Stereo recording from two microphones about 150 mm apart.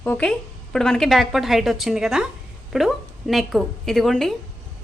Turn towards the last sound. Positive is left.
turn(degrees=0)  # may be behind; listen again after turning